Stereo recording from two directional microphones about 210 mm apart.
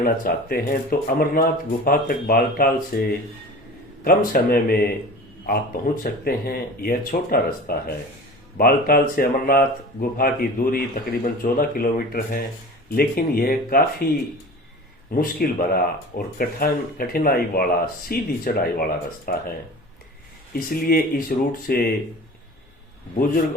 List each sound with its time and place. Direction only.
0.0 s speech: 45° left (ahead or behind)
4.0 s speech: 40° left (ahead or behind)
15.1 s speech: 45° left (ahead or behind)
20.5 s speech: 45° left (ahead or behind)